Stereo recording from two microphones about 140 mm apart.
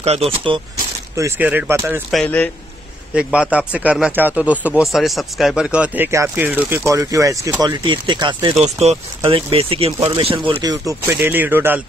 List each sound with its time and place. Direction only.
0.0 s speech: 45° right (ahead or behind)
1.4 s speech: 10° right (ahead or behind)
2.0 s speech: 5° left (ahead or behind)
3.2 s speech: 10° right (ahead or behind); by 7.5 s 25° right (ahead or behind)
7.6 s speech: 35° right (ahead or behind)
8.5 s speech: 50° right (ahead or behind); by 11.8 s 15° right (ahead or behind)